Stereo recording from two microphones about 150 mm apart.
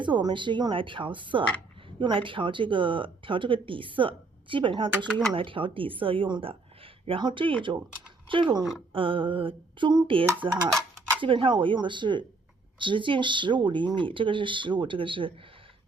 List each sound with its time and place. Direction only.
0.0 s speech: 30° right (ahead or behind)